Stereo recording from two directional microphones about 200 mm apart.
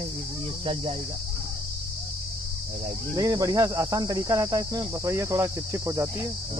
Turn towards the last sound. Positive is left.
turn(degrees=-15)  # may be behind; listen again after turning